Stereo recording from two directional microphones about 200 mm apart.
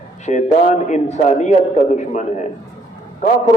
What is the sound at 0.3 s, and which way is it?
A man's voice, 35° left (ahead or behind).